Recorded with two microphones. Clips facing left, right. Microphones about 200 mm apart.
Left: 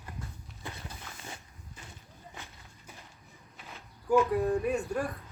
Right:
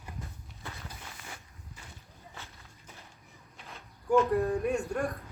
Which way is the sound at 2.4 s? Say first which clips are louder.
Left 1 dB; 15° left (ahead or behind).